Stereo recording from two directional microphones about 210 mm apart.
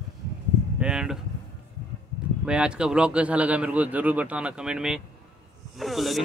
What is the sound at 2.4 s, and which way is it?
Speech, 5° right (ahead or behind).